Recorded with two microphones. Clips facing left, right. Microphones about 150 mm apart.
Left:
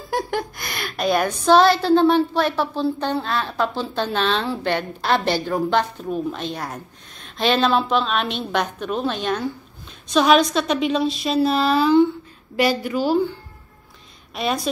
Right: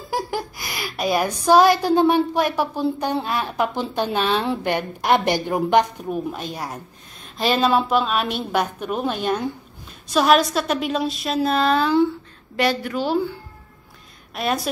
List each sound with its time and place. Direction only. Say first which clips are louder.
0.1 s a woman's voice: left 2 dB; 5° right (ahead or behind)
14.3 s a woman's voice: even; 5° right (ahead or behind)